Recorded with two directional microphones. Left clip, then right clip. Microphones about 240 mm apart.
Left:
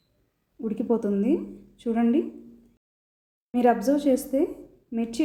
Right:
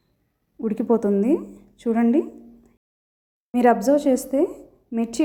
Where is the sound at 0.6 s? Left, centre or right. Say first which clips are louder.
Right 5 dB; right.